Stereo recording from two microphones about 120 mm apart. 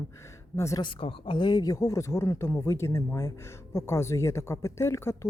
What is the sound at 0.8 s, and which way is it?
Speech, 45° left (ahead or behind).